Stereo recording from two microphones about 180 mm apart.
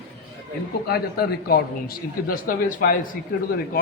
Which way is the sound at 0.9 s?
60° left (ahead or behind).